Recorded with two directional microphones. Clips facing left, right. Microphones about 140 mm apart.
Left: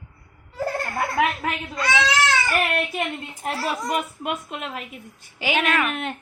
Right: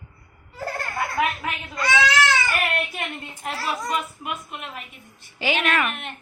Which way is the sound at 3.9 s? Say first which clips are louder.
Left 2 dB; 50° left (ahead or behind).